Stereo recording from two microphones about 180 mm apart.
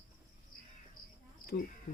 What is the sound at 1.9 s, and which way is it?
Speech, 50° left (ahead or behind).